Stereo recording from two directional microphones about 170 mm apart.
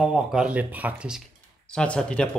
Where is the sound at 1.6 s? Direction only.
5° left (ahead or behind).